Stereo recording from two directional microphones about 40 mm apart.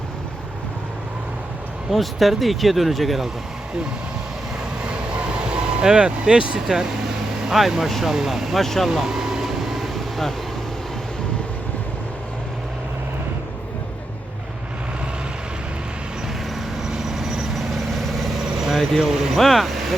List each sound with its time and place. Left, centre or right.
1.9 s speech: centre
5.5 s speech: right
6.6 s speech: centre
8.1 s speech: centre
8.6 s speech: centre
8.9 s vehicle: centre
16.9 s vehicle: centre
18.3 s vehicle: centre
19.4 s speech: centre